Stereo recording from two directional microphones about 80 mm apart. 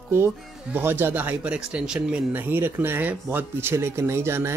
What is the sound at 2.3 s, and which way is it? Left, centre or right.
Speech, right.